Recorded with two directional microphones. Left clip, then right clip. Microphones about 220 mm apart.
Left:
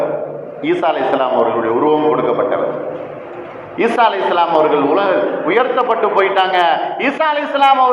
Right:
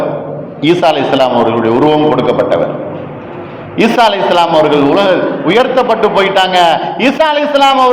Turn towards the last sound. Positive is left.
turn(degrees=-55)  # may be behind; listen again after turning